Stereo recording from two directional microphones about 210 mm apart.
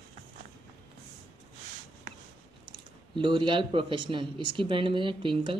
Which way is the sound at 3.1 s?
20° right (ahead or behind).